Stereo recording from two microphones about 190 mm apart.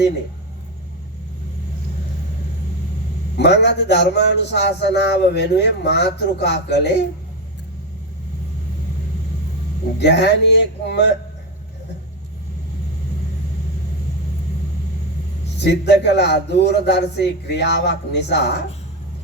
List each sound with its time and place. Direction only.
3.3 s a man's voice: 65° left (ahead or behind)
10.0 s a man's voice: 65° left (ahead or behind)
15.6 s a man's voice: 60° left (ahead or behind)